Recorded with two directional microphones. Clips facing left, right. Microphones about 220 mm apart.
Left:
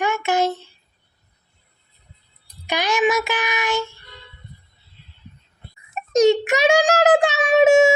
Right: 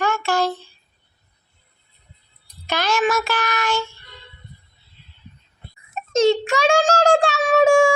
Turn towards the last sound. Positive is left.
turn(degrees=20)  # may be behind; listen again after turning